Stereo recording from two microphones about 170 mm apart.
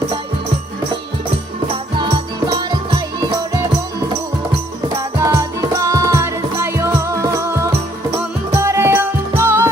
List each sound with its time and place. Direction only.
1.6 s music: 30° right (ahead or behind)
5.2 s music: 20° right (ahead or behind)